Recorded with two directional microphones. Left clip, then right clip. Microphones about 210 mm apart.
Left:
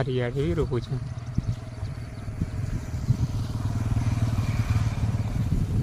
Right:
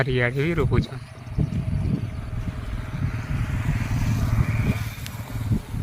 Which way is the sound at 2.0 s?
40° right (ahead or behind).